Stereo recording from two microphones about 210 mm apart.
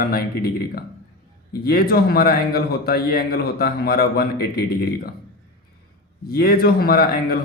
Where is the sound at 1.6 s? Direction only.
50° left (ahead or behind).